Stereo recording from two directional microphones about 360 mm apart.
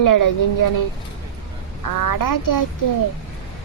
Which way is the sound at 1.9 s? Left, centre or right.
Left.